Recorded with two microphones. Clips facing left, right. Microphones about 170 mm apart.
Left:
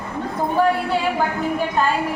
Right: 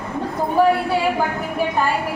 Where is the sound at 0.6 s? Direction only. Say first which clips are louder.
Right 3 dB; 10° right (ahead or behind).